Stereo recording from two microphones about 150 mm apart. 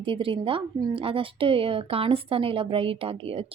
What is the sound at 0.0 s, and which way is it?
A woman's voice, 35° right (ahead or behind).